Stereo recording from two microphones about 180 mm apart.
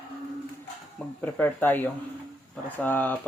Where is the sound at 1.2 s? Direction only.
10° left (ahead or behind).